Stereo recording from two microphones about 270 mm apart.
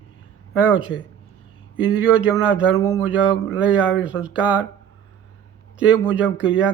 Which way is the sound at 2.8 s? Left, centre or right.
Centre.